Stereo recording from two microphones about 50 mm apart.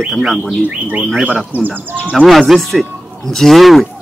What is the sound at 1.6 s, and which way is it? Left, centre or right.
Speech, right.